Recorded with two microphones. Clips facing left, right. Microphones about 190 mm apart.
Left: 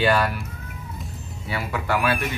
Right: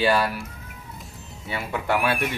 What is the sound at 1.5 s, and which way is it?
Speech, 20° right (ahead or behind).